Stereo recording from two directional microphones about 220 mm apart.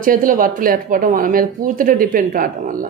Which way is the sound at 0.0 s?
40° right (ahead or behind).